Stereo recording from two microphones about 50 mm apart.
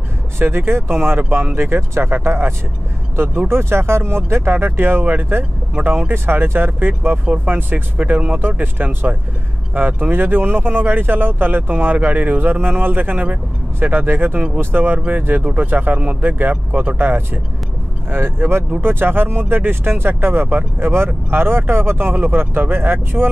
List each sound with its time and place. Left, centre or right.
0.4 s speech: right
18.1 s speech: right